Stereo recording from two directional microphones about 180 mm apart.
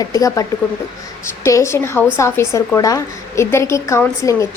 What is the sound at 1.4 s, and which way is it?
A woman's voice, 15° left (ahead or behind).